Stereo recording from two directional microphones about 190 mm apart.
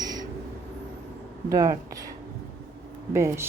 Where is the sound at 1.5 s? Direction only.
20° right (ahead or behind).